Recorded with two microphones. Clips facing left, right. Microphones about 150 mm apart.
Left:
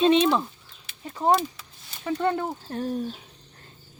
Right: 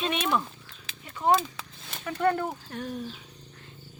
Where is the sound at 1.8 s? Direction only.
90° right.